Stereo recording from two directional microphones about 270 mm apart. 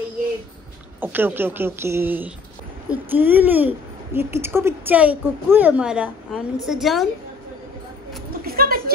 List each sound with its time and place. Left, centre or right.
1.0 s speech: centre
8.3 s bird: right